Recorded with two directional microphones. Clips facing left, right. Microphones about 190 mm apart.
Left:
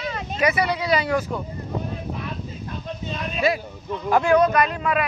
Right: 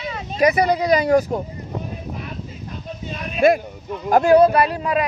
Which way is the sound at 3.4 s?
50° right (ahead or behind).